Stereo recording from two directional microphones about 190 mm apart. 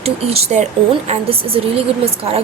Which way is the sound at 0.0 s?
30° right (ahead or behind).